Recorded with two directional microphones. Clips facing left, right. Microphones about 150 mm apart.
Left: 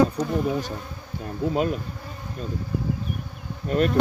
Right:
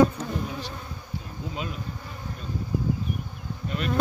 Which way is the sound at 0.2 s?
45° left (ahead or behind).